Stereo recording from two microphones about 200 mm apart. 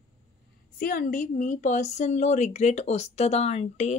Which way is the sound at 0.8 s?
45° left (ahead or behind).